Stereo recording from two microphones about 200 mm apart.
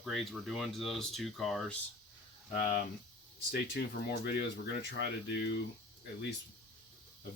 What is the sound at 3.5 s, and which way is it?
Speech, 55° left (ahead or behind).